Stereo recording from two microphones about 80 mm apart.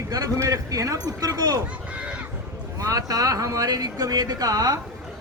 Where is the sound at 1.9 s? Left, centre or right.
Centre.